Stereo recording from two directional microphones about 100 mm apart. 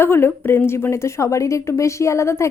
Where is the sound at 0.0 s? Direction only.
25° left (ahead or behind).